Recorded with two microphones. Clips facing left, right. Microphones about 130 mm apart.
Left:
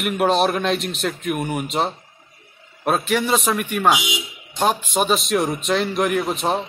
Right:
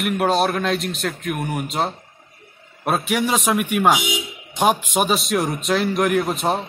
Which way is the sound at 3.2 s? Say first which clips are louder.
Right 1 dB; 10° right (ahead or behind).